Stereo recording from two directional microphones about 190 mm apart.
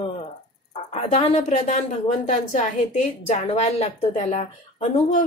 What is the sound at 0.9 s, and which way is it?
Speech, 30° left (ahead or behind).